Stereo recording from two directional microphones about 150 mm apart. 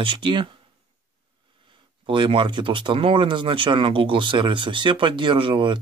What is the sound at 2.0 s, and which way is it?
Speech, 35° right (ahead or behind).